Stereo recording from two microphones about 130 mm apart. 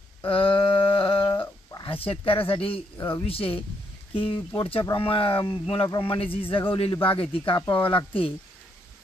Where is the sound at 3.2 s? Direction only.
45° left (ahead or behind).